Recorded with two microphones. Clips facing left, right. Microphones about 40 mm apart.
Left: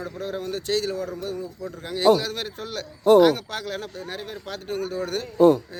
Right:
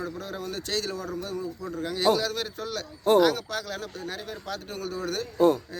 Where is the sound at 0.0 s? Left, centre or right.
Left.